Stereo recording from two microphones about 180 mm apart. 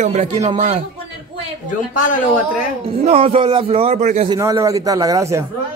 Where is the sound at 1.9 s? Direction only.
50° left (ahead or behind).